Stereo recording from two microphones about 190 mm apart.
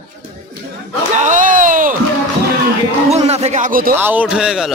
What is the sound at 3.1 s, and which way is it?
Speech, 35° right (ahead or behind).